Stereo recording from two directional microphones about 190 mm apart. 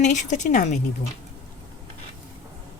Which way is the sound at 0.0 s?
40° left (ahead or behind).